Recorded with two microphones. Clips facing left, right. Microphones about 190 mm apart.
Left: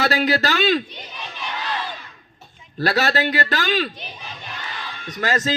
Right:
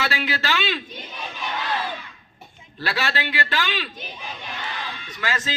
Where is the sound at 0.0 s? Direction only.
40° left (ahead or behind).